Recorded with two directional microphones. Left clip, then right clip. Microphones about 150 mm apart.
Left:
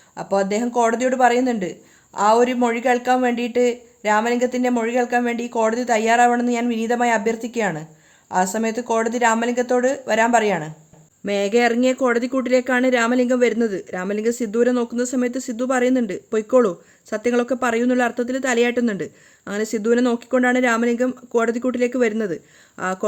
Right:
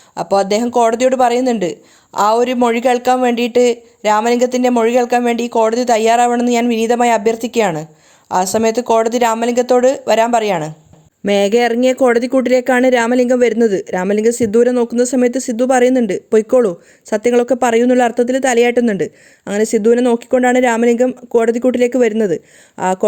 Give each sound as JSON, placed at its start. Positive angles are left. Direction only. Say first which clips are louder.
{"t": 0.1, "sound": "speech", "louder": "right 7 dB", "side_deg": -35}
{"t": 11.3, "sound": "speech", "louder": "right 6 dB", "side_deg": -50}